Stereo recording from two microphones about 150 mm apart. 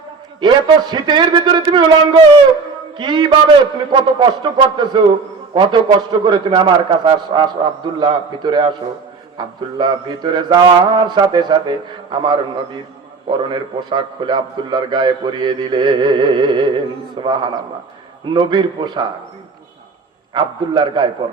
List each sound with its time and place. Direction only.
0.4 s mantra: 30° right (ahead or behind)
3.0 s a man's voice: 30° right (ahead or behind)
9.4 s mantra: 30° right (ahead or behind)
12.1 s a man's voice: 30° right (ahead or behind)
20.3 s a man's voice: 30° right (ahead or behind)